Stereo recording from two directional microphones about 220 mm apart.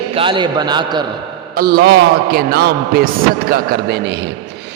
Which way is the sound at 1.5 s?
45° right (ahead or behind).